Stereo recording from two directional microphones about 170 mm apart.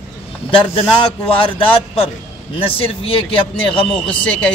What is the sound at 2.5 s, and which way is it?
A man's voice, 35° left (ahead or behind).